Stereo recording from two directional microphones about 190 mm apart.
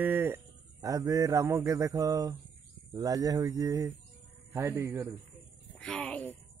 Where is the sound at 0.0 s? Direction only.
10° right (ahead or behind).